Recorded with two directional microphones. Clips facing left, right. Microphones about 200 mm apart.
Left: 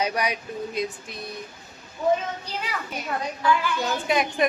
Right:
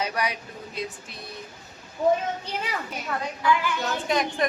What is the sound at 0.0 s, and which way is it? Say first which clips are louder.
Speech: left 3 dB; 15° left (ahead or behind).